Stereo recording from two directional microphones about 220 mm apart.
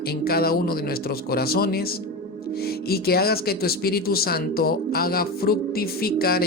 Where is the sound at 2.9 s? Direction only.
45° left (ahead or behind).